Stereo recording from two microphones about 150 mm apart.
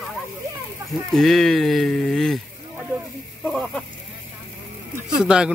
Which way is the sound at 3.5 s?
Centre (ahead or behind).